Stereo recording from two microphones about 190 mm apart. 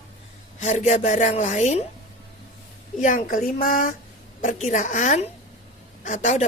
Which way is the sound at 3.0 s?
45° left (ahead or behind).